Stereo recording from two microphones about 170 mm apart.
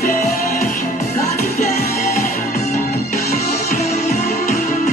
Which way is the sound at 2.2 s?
50° left (ahead or behind).